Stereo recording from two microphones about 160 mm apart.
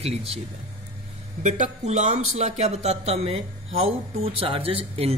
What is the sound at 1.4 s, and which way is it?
Speech, 50° right (ahead or behind).